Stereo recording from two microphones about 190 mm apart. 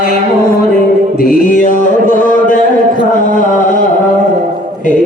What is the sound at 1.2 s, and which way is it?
Mantra, 45° left (ahead or behind).